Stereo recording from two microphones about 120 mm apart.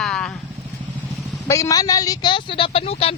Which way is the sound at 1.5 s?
25° left (ahead or behind).